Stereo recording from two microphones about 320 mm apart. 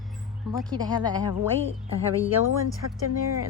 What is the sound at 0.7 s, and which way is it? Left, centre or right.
Speech, centre.